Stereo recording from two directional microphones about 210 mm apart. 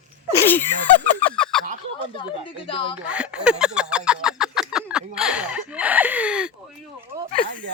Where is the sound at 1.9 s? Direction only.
25° left (ahead or behind).